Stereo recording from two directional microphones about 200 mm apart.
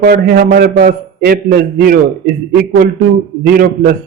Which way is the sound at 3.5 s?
45° right (ahead or behind).